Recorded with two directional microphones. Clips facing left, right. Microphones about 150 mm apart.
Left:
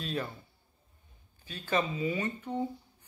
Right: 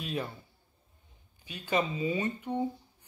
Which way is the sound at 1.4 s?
15° right (ahead or behind).